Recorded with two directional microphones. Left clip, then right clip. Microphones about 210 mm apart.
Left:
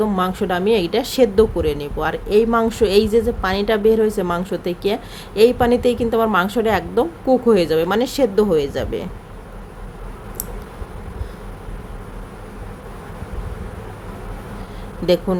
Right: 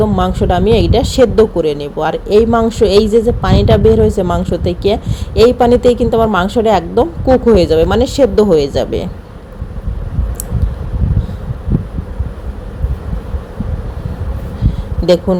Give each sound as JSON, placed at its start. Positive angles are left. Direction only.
{"t": 0.0, "sound": "a woman's voice", "side_deg": -5}
{"t": 15.0, "sound": "speech", "side_deg": -5}